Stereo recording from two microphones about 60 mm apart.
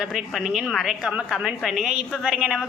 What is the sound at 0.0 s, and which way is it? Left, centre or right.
A woman's voice, centre.